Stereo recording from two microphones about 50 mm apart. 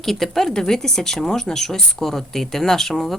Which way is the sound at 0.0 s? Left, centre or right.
Centre.